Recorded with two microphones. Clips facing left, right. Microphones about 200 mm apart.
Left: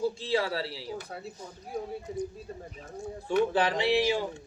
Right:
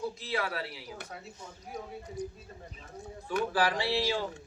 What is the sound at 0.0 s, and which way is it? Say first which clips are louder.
Speech: left 6 dB; 30° left (ahead or behind).